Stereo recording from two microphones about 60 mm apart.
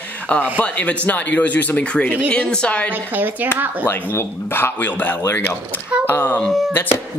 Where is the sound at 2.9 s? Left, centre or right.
Right.